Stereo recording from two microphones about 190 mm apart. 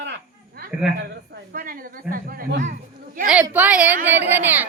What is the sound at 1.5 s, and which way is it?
A woman's voice, 50° right (ahead or behind).